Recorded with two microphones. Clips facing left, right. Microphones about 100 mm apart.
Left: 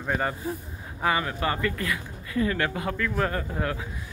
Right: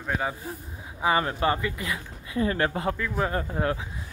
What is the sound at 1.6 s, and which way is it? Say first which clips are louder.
Speech: left 2 dB; 15° right (ahead or behind).